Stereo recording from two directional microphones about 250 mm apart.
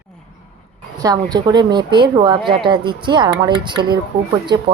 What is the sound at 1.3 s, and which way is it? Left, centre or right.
Speech, centre.